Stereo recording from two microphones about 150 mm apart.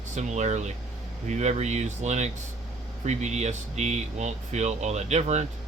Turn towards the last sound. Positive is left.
turn(degrees=-50)  # may be behind; listen again after turning